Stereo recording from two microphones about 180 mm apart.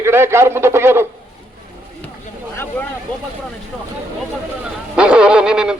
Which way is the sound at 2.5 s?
15° left (ahead or behind).